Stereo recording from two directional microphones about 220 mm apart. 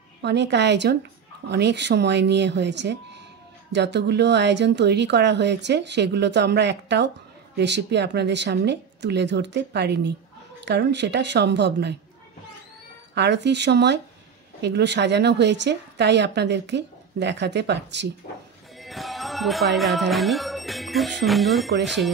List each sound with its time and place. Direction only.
0.2 s a woman's voice: 50° right (ahead or behind)
13.1 s a woman's voice: 50° right (ahead or behind)
18.8 s speech: centre (ahead or behind)